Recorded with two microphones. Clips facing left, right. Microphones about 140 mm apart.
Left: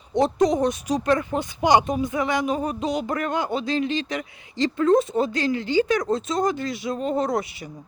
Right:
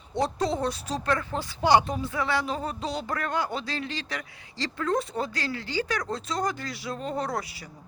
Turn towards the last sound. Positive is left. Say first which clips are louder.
# left 7 dB
turn(degrees=20)  # may be behind; listen again after turning